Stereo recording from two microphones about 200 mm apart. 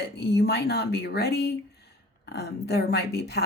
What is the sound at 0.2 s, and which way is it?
Speech, 55° left (ahead or behind).